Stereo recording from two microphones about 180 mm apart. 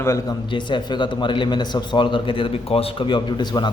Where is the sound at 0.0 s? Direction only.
15° left (ahead or behind).